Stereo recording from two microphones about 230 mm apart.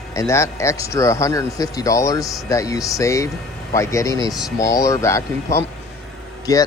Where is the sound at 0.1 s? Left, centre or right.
Centre.